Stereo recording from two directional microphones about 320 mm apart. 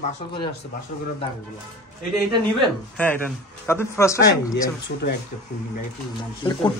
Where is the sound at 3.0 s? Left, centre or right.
Centre.